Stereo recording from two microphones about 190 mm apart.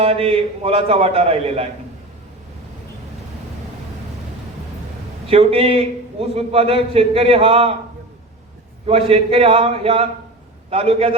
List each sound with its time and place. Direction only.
0.0 s a man's voice: 30° right (ahead or behind)
5.3 s a man's voice: 30° right (ahead or behind)
8.9 s a man's voice: 30° right (ahead or behind)